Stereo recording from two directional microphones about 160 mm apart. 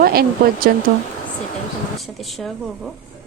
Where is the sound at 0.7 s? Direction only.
80° right.